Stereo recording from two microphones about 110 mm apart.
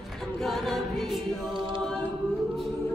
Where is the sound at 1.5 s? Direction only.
50° right (ahead or behind).